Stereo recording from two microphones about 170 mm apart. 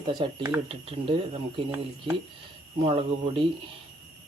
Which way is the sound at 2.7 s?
35° right (ahead or behind).